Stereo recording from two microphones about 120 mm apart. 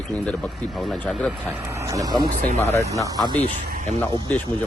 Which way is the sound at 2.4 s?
65° left (ahead or behind).